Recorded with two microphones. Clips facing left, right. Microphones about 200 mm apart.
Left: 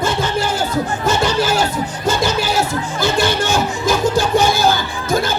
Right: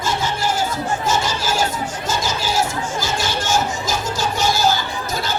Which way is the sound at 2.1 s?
60° left (ahead or behind).